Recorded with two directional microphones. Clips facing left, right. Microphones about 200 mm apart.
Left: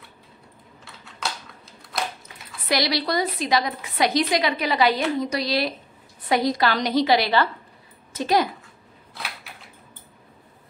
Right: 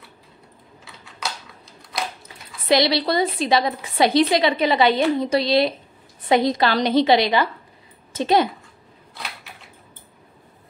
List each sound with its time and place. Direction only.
0.8 s typing: centre (ahead or behind)
2.7 s a woman's voice: 25° right (ahead or behind)